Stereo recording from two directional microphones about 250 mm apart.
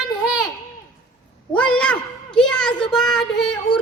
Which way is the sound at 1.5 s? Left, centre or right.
Centre.